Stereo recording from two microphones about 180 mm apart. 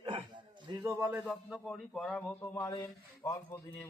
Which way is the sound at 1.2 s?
Centre (ahead or behind).